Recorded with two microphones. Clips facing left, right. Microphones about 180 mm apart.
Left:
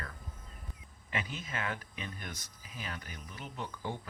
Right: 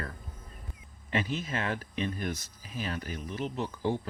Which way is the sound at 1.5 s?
30° right (ahead or behind).